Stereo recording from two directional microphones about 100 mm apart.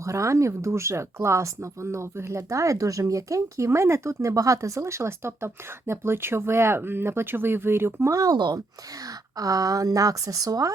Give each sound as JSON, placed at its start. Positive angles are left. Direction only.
{"t": 0.0, "sound": "speech", "side_deg": -30}